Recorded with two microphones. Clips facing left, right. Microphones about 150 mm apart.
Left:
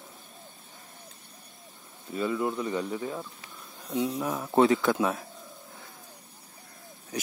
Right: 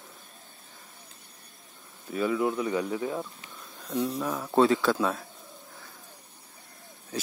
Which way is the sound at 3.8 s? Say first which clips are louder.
Even; 10° left (ahead or behind).